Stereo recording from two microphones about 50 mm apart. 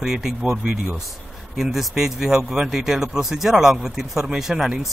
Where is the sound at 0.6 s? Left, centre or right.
Right.